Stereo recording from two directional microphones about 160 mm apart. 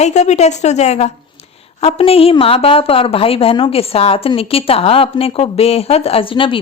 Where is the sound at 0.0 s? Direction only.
45° left (ahead or behind).